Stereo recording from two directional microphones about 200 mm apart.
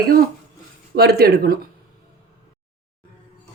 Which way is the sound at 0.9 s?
55° right (ahead or behind).